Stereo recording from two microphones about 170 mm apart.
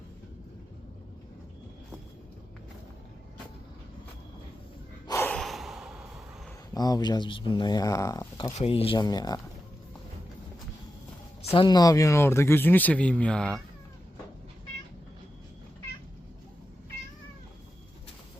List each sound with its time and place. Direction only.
5.0 s snort: 15° left (ahead or behind)
5.4 s a sound: centre (ahead or behind)
6.7 s speech: 25° left (ahead or behind)
8.5 s speech: 35° left (ahead or behind)
11.4 s speech: 30° left (ahead or behind); by 13.6 s 5° left (ahead or behind)